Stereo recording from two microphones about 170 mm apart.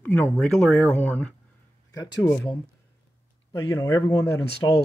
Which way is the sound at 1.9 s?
20° left (ahead or behind).